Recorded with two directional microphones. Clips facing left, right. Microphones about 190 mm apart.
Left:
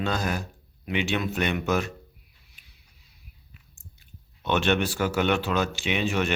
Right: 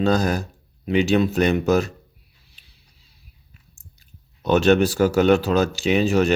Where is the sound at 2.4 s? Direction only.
30° right (ahead or behind).